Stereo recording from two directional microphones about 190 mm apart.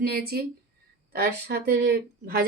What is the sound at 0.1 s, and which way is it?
A woman's voice, 55° right (ahead or behind).